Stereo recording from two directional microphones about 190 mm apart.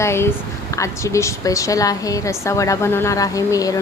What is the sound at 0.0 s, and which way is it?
A woman's voice, 15° left (ahead or behind).